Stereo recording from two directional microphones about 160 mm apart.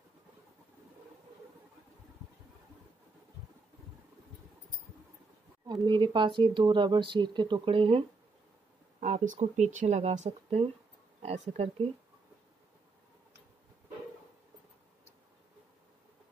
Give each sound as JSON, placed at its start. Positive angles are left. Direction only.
{"t": 5.7, "sound": "speech", "side_deg": -30}
{"t": 9.0, "sound": "speech", "side_deg": -50}